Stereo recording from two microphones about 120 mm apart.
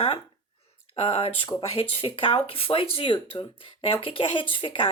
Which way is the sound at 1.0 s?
50° left (ahead or behind).